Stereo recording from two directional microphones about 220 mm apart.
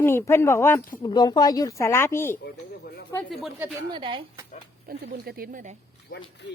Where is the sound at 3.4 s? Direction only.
Centre (ahead or behind).